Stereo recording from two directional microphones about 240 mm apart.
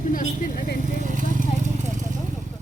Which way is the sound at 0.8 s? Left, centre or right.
Right.